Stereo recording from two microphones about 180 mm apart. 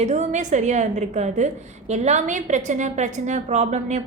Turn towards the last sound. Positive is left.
turn(degrees=-40)  # may be behind; listen again after turning